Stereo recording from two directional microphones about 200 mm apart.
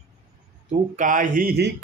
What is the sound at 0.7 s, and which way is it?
Speech, 40° right (ahead or behind).